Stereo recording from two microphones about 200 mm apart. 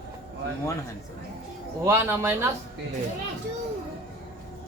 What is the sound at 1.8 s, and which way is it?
Speech, 10° right (ahead or behind).